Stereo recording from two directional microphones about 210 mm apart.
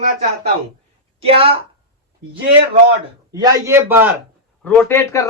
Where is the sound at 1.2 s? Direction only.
25° right (ahead or behind).